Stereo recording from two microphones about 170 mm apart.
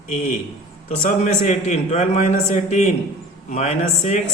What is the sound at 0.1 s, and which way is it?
A man's voice, 45° left (ahead or behind).